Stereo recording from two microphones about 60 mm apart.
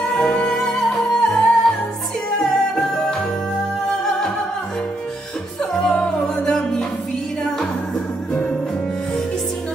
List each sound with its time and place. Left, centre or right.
0.1 s music: centre
5.6 s music: centre
8.3 s music: left